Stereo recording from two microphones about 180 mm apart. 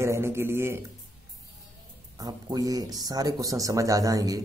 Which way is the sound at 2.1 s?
20° right (ahead or behind).